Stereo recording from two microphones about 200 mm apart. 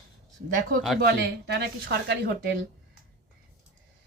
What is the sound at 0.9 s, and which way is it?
Speech, 50° right (ahead or behind).